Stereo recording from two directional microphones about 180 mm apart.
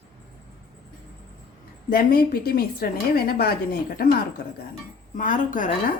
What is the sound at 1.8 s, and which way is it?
A woman's voice, 55° left (ahead or behind).